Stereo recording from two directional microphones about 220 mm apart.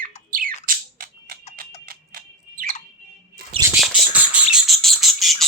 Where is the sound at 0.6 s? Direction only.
40° right (ahead or behind).